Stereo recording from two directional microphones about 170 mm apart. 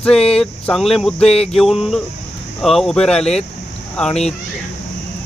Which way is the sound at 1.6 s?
Centre (ahead or behind).